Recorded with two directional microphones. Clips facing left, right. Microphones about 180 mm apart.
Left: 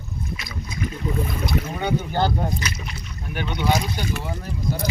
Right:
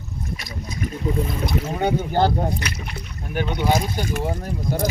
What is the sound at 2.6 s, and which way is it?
Speech, 60° right (ahead or behind).